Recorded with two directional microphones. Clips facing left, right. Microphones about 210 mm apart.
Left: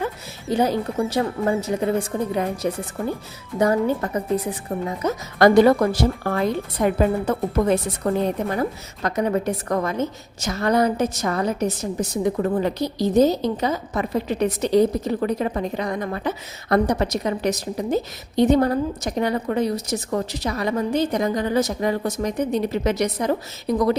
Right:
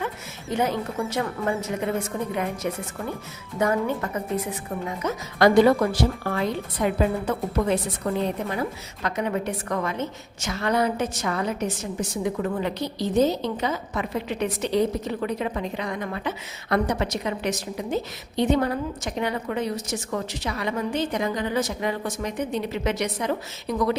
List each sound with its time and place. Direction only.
0.5 s a woman's voice: 35° left (ahead or behind)